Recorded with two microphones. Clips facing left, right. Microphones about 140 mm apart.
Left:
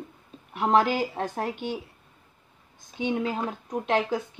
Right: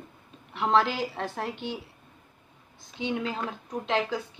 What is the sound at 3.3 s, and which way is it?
Speech, 15° left (ahead or behind).